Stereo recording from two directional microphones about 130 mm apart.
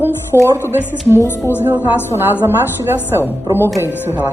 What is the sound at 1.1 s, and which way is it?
Speech, 20° left (ahead or behind).